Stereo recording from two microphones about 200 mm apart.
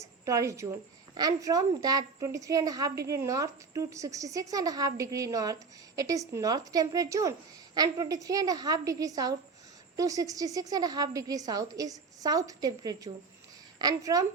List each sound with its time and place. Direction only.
0.3 s a woman's voice: 15° right (ahead or behind)